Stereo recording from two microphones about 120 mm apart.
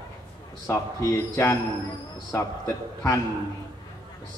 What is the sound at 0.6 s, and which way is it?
Speech, 25° left (ahead or behind).